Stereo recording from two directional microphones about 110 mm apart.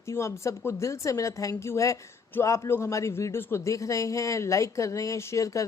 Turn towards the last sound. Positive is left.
turn(degrees=30)  # may be behind; listen again after turning